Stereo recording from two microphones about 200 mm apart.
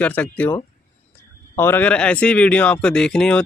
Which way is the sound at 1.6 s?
10° left (ahead or behind).